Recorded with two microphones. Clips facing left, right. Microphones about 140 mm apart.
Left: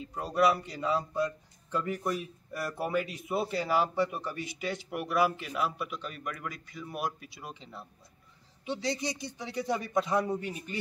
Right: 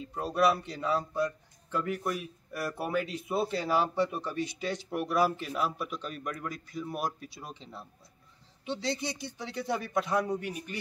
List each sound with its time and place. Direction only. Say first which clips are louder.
0.2 s speech: even; 15° left (ahead or behind)
8.6 s speech: left 1 dB; 15° left (ahead or behind)